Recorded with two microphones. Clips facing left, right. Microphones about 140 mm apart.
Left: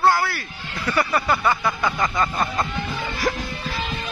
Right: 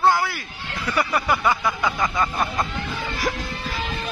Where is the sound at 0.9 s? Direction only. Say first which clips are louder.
Left 1 dB; 10° right (ahead or behind).